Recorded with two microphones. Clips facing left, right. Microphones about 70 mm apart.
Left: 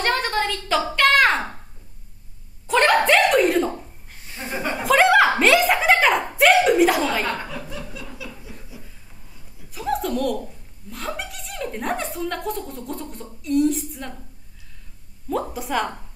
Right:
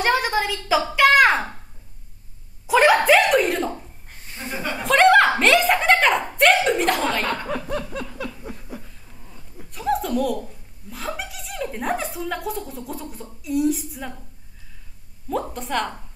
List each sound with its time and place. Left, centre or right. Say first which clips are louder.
0.0 s a woman's voice: right 2 dB; centre
2.6 s speech: right 2 dB; centre
4.8 s speech: right 1 dB; centre
7.4 s laughter: right 6 dB; right
9.7 s speech: right 1 dB; centre
15.2 s speech: left 1 dB; centre